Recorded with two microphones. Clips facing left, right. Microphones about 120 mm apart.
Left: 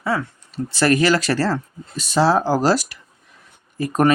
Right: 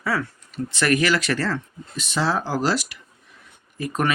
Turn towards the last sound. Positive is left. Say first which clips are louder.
# left 7 dB
turn(degrees=40)  # may be behind; listen again after turning